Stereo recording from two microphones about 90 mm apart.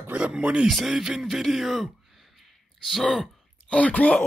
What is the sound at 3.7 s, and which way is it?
Speech, 15° left (ahead or behind).